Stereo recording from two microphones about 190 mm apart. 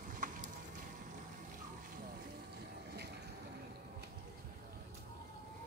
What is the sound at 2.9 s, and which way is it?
Vehicle, 60° right (ahead or behind).